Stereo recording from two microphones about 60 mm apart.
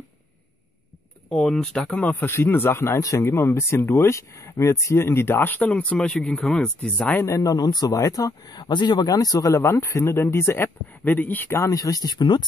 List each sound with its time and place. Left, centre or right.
1.3 s speech: centre; by 3.0 s left
3.0 s speech: left
3.3 s speech: left
7.2 s speech: left
9.6 s speech: left
11.5 s speech: left